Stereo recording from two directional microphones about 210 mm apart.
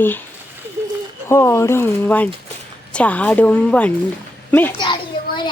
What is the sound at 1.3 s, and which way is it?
A child's voice, 15° left (ahead or behind).